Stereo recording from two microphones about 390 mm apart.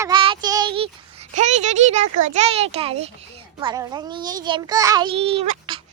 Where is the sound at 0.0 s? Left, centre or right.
Centre.